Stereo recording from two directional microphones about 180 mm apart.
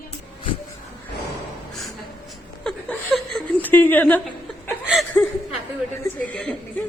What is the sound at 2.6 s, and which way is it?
Chuckle, 5° left (ahead or behind).